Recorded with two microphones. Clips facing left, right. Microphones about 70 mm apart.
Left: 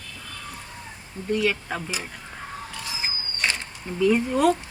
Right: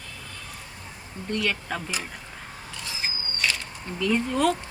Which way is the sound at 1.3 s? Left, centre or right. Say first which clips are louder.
Left 4 dB; centre.